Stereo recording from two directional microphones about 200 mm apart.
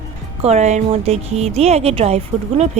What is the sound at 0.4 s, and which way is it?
A woman's voice, 35° right (ahead or behind).